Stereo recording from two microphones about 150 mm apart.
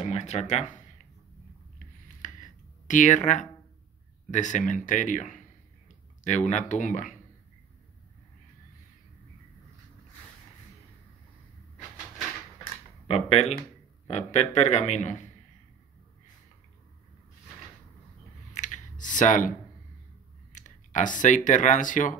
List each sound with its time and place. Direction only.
0.0 s a man's voice: 50° left (ahead or behind)
2.2 s a sound: 60° left (ahead or behind)
4.3 s a man's voice: 55° left (ahead or behind)
13.1 s a man's voice: 45° left (ahead or behind)
18.6 s computer keyboard: 55° left (ahead or behind)
20.5 s speech: 55° left (ahead or behind)